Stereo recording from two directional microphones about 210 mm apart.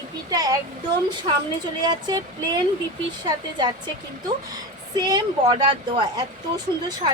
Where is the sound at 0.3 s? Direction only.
15° right (ahead or behind).